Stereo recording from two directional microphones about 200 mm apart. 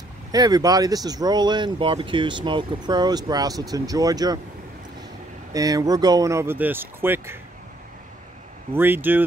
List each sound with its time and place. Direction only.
0.3 s speech: 20° right (ahead or behind)
5.5 s speech: 15° right (ahead or behind)
8.7 s speech: 10° right (ahead or behind)